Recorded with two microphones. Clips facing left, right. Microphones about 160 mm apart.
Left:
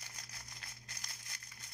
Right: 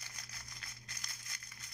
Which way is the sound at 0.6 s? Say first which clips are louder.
Even; 25° left (ahead or behind).